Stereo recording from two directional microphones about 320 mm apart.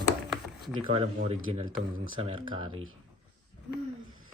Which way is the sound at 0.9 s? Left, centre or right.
Centre.